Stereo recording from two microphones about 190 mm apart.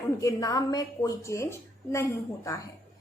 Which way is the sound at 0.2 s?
15° left (ahead or behind).